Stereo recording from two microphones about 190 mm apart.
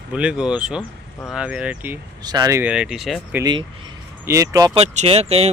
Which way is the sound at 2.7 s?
5° right (ahead or behind).